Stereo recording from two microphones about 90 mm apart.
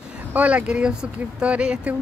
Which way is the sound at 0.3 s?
15° right (ahead or behind).